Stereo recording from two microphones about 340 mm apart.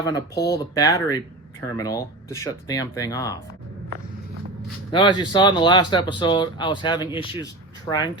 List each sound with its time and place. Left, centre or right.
0.4 s speech: centre
4.9 s speech: centre